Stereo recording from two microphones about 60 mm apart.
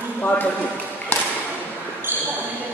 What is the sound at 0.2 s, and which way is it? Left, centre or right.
Speech, left.